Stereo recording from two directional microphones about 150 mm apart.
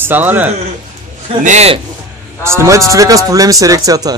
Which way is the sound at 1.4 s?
45° right (ahead or behind).